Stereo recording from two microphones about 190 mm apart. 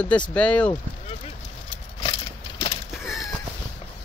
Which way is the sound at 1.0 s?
30° left (ahead or behind).